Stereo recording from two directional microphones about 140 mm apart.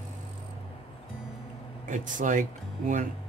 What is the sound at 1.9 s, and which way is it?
Speech, 65° right (ahead or behind).